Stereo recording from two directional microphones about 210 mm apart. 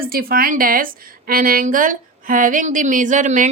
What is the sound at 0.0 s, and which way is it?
A woman's voice, 45° right (ahead or behind).